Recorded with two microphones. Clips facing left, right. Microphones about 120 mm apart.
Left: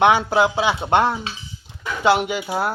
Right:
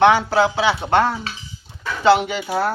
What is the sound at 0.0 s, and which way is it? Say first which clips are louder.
Speech: right 1 dB; 20° left (ahead or behind).